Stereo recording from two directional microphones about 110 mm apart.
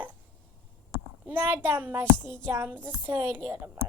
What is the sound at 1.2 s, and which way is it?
A woman's voice, 20° right (ahead or behind).